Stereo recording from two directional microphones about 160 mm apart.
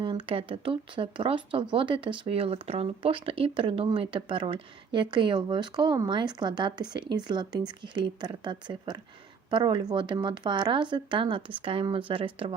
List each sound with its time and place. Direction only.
0.3 s speech: 35° right (ahead or behind)